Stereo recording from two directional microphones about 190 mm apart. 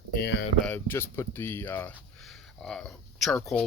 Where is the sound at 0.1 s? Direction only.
55° left (ahead or behind).